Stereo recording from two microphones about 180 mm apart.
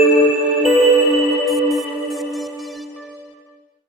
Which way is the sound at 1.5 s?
Centre (ahead or behind).